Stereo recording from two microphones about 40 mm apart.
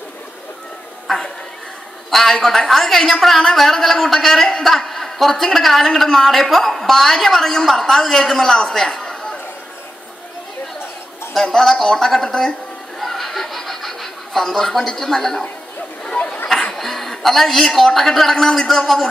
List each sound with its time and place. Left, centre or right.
2.0 s a woman's voice: centre
9.0 s a sound: centre
11.6 s a woman's voice: centre
13.0 s chuckle: centre
16.0 s chatter: left
16.7 s chuckle: centre
17.7 s a woman's voice: centre